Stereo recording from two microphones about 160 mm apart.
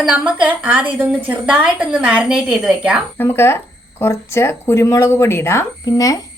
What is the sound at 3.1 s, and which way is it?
Speech, 15° left (ahead or behind).